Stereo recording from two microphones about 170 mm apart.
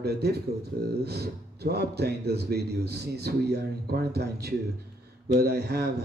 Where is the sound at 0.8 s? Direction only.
70° right (ahead or behind).